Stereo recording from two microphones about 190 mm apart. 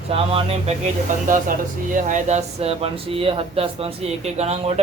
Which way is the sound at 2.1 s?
40° right (ahead or behind).